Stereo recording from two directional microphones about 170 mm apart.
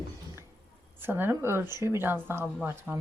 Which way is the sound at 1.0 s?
15° right (ahead or behind).